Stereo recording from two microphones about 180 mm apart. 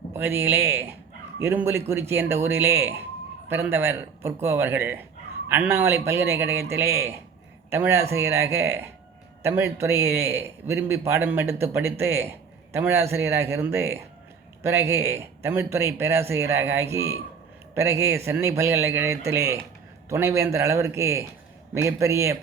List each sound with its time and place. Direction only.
0.1 s a man's voice: 15° right (ahead or behind)